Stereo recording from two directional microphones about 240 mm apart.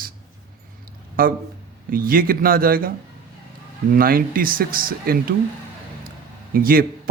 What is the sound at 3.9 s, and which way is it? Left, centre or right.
Speech, right.